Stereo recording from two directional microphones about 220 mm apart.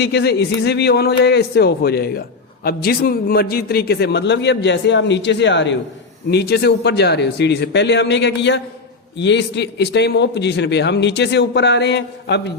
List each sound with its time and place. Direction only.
0.0 s speech: 50° left (ahead or behind)